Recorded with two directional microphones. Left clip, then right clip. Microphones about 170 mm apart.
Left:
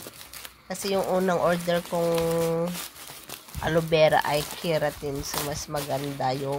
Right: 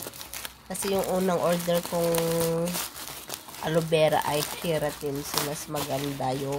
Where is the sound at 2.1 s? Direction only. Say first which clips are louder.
Left 2 dB; 5° left (ahead or behind).